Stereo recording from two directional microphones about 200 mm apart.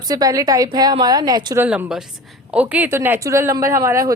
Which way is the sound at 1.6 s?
5° right (ahead or behind).